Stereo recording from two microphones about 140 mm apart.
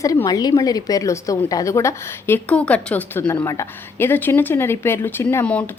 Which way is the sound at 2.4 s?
10° left (ahead or behind).